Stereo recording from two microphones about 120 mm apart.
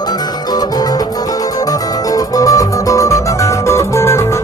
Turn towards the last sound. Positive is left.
turn(degrees=20)  # may be behind; listen again after turning